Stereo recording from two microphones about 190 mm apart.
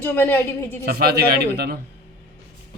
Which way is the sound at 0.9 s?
55° right (ahead or behind).